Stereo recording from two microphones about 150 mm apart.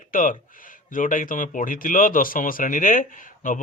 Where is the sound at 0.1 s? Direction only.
65° left (ahead or behind).